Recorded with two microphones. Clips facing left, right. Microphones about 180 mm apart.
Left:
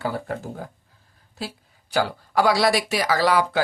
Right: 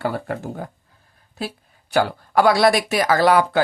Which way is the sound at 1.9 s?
55° right (ahead or behind).